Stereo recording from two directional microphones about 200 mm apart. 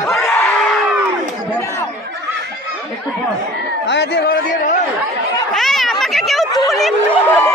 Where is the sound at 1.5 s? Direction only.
10° left (ahead or behind).